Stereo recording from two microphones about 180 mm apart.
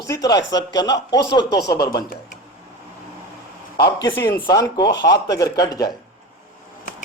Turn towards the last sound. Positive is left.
turn(degrees=20)  # may be behind; listen again after turning